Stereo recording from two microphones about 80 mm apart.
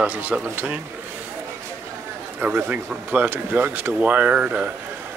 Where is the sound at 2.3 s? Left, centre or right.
Right.